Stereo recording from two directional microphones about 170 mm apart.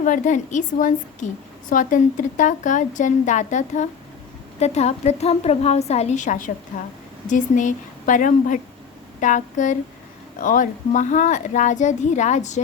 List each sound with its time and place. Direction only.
0.0 s a woman's voice: 50° left (ahead or behind)